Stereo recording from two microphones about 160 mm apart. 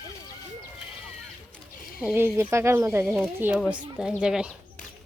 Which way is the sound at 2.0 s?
10° right (ahead or behind).